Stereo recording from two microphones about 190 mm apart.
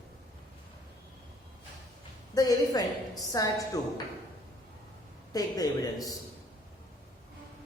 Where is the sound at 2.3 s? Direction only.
20° left (ahead or behind).